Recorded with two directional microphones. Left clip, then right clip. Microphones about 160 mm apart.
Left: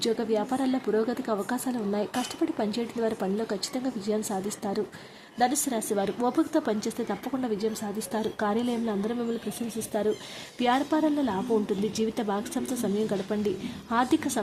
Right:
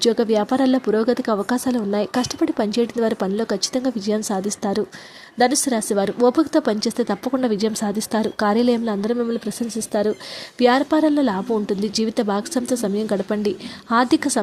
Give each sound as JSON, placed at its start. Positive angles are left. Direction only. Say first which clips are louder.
{"t": 0.0, "sound": "speech", "louder": "right 9 dB", "side_deg": -35}
{"t": 5.4, "sound": "speech", "louder": "right 8 dB", "side_deg": -35}